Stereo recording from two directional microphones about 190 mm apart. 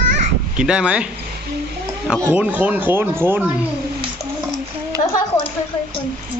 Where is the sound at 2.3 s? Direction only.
10° right (ahead or behind).